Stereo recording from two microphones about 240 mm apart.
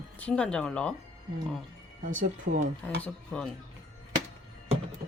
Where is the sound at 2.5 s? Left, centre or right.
Right.